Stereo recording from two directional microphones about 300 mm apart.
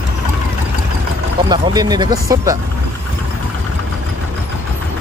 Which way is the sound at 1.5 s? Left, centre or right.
Centre.